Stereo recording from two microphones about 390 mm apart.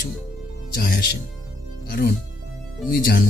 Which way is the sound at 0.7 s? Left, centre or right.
Left.